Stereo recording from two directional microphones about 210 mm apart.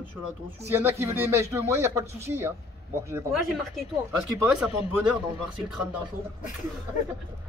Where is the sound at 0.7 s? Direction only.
10° right (ahead or behind).